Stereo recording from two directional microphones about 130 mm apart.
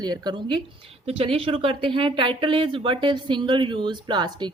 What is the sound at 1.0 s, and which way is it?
Speech, 50° right (ahead or behind).